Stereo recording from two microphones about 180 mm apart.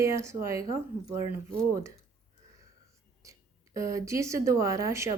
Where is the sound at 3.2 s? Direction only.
15° right (ahead or behind).